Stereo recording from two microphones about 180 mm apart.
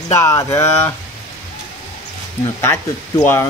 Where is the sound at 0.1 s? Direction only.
15° left (ahead or behind).